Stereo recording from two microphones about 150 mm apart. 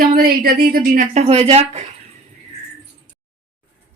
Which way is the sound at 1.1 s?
45° right (ahead or behind).